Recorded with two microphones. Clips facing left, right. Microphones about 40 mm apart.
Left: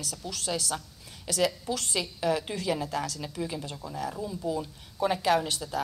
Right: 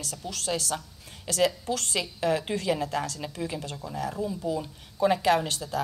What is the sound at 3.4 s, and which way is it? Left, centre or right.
Speech, right.